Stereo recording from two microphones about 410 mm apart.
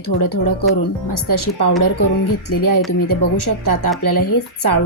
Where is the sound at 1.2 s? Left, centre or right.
Left.